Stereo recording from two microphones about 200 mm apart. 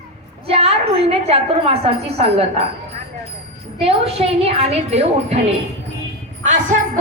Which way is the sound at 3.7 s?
30° right (ahead or behind).